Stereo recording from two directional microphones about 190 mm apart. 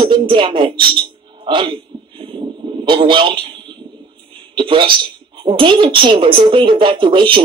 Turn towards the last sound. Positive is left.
turn(degrees=-25)  # may be behind; listen again after turning